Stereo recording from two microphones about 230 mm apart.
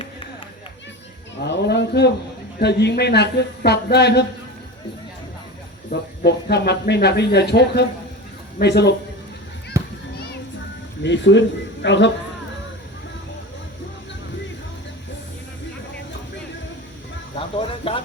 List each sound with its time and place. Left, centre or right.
1.4 s a sound: left
2.6 s speech: left
5.9 s speech: left
9.7 s children playing: centre
11.0 s speech: left
17.3 s music: left